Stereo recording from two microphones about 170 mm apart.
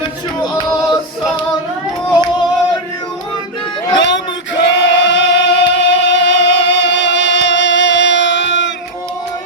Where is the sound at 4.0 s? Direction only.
90° left.